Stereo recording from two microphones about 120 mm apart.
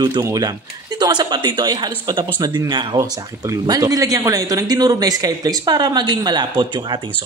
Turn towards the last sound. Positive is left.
turn(degrees=-40)  # may be behind; listen again after turning